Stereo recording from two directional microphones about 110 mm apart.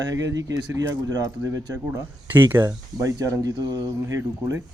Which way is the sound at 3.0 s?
30° right (ahead or behind).